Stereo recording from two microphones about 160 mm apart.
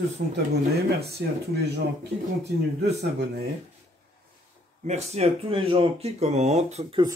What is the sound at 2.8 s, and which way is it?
Speech, 90° right.